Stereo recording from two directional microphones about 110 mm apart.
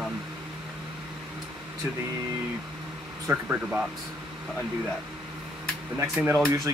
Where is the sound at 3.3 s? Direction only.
15° right (ahead or behind).